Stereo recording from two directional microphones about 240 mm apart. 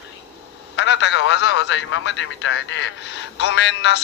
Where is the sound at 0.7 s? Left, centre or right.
Left.